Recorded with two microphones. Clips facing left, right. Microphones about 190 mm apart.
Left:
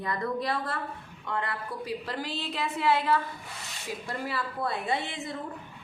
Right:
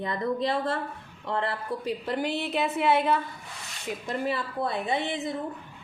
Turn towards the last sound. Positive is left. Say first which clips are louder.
# right 3 dB
turn(degrees=-20)  # may be behind; listen again after turning